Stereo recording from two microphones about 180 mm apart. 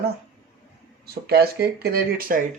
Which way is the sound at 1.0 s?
60° right (ahead or behind).